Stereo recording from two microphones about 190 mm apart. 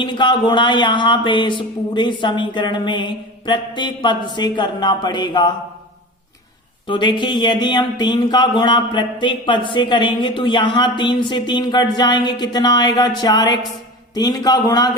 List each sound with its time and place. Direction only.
0.0 s speech: 25° left (ahead or behind)
6.8 s speech: 25° left (ahead or behind)